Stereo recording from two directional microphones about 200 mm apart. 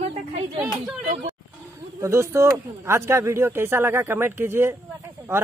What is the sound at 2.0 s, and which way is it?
Speech, 15° right (ahead or behind).